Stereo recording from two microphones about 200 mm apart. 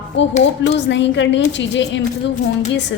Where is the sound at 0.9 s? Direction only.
65° left (ahead or behind).